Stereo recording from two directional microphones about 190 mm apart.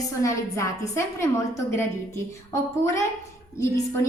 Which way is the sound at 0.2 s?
15° left (ahead or behind).